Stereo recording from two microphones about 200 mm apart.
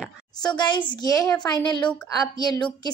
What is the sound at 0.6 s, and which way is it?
Speech, 20° left (ahead or behind).